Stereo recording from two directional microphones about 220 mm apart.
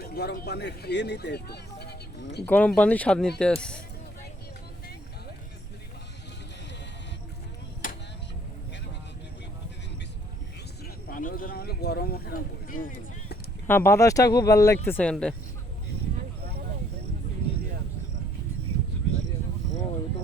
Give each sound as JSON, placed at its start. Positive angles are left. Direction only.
{"t": 0.0, "sound": "speech", "side_deg": 45}
{"t": 2.5, "sound": "speech", "side_deg": 5}
{"t": 7.8, "sound": "vehicle", "side_deg": 40}
{"t": 11.1, "sound": "a sound", "side_deg": 40}
{"t": 13.7, "sound": "speech", "side_deg": 10}